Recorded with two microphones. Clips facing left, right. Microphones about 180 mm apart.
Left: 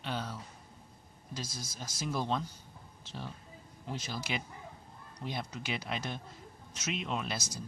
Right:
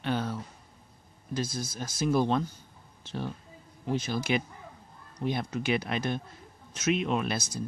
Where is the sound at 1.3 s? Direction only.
60° right (ahead or behind).